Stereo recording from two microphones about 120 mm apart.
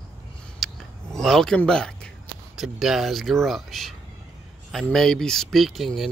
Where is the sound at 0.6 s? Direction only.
5° left (ahead or behind).